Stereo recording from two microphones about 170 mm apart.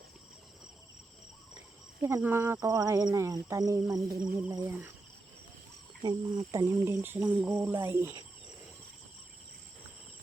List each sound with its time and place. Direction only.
2.0 s speech: 15° right (ahead or behind)
6.0 s speech: 25° right (ahead or behind)